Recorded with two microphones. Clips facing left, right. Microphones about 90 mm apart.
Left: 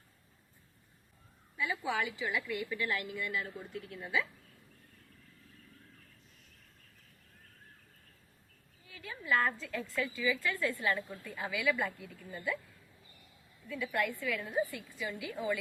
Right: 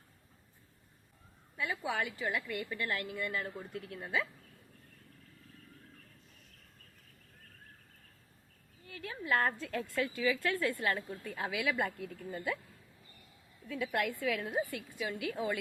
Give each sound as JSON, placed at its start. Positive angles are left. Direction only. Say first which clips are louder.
{"t": 1.5, "sound": "a woman's voice", "louder": "left 1 dB", "side_deg": -55}
{"t": 8.9, "sound": "a woman's voice", "louder": "even", "side_deg": -60}
{"t": 13.7, "sound": "a woman's voice", "louder": "even", "side_deg": -55}